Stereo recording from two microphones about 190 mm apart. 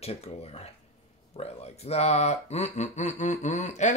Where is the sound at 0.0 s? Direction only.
35° left (ahead or behind).